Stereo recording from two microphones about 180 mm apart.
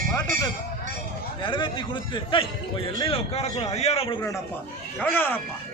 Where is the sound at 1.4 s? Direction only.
25° left (ahead or behind).